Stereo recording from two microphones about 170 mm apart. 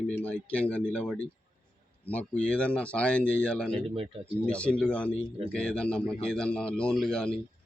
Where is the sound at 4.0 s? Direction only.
30° right (ahead or behind).